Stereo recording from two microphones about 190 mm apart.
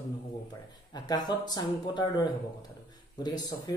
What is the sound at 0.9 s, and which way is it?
Speech, 20° left (ahead or behind).